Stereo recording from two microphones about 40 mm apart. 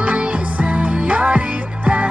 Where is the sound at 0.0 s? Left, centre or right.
Right.